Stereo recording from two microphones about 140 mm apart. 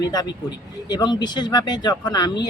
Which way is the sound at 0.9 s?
30° left (ahead or behind).